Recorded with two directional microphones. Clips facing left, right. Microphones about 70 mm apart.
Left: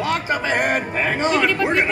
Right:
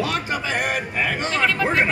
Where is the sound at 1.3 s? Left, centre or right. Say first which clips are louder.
Right 1 dB; centre.